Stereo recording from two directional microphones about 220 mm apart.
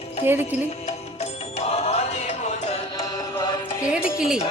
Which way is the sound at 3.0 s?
15° left (ahead or behind).